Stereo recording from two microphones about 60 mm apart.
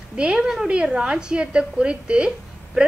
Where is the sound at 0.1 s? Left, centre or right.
Centre.